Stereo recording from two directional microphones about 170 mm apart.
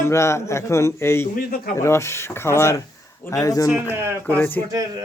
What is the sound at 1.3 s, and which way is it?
Speech, 60° left (ahead or behind).